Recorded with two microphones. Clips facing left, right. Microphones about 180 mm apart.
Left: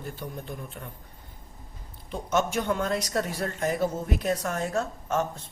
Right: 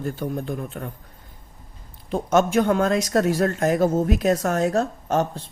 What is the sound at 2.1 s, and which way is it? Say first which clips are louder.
Speech: right 7 dB; 90° right.